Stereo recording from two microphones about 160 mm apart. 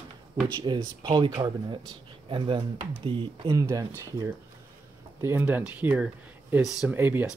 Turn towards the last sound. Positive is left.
turn(degrees=-15)  # may be behind; listen again after turning